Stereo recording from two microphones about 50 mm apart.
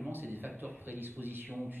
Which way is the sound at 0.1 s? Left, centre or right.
Right.